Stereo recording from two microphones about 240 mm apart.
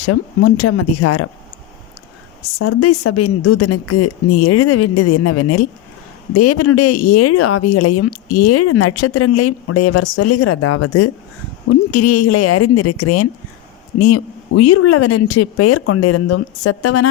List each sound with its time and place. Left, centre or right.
0.0 s speech: left
2.6 s speech: left